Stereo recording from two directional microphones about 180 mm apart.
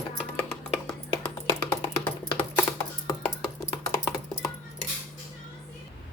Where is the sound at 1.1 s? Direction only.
25° left (ahead or behind).